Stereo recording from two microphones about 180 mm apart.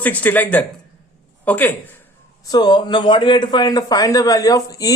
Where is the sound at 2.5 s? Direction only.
25° left (ahead or behind).